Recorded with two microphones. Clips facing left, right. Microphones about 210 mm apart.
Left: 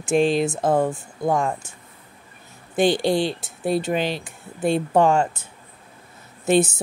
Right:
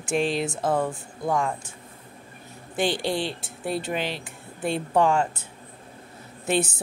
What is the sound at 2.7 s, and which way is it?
Speech, 45° left (ahead or behind).